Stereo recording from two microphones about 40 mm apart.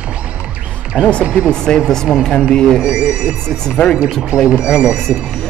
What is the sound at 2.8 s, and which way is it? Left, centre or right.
Speech, right.